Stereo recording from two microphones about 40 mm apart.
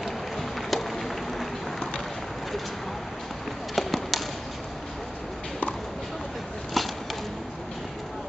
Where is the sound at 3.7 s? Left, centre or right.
Centre.